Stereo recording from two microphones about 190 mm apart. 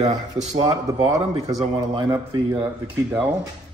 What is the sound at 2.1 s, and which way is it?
A man's voice, 15° right (ahead or behind).